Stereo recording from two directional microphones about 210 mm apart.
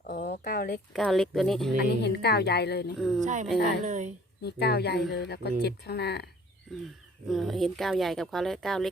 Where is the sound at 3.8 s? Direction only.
35° right (ahead or behind).